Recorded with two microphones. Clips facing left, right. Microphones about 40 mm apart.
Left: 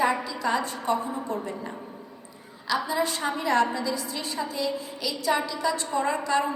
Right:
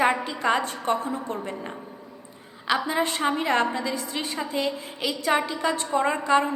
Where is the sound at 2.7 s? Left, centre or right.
Right.